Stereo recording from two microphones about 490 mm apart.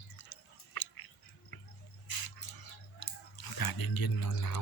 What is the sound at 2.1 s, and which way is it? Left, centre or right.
Bird, left.